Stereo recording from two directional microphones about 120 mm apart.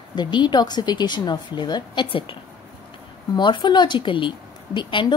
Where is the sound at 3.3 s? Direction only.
40° left (ahead or behind).